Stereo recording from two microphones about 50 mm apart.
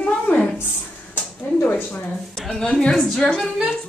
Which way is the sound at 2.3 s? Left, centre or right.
Centre.